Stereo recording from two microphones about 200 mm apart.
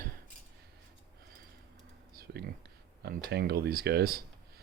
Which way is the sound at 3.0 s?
50° right (ahead or behind).